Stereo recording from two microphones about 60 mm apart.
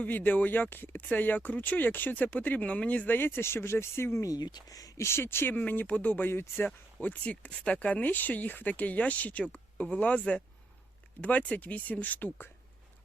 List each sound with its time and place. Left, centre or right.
0.0 s speech: left
4.2 s speech: left
5.0 s speech: left
5.5 s speech: left
7.0 s speech: left